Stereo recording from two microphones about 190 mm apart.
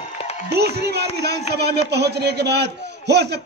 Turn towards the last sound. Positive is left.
turn(degrees=-60)  # may be behind; listen again after turning